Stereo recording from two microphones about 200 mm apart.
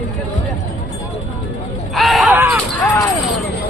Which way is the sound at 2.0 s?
Centre (ahead or behind).